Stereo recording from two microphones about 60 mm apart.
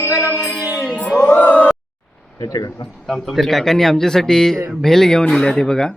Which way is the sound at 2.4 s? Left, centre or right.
Left.